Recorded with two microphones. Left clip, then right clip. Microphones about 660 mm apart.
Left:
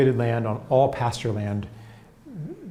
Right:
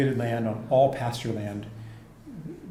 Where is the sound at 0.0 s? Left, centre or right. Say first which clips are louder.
Left 5 dB; left.